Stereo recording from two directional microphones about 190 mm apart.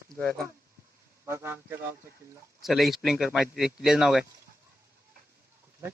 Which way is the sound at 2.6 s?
Centre (ahead or behind).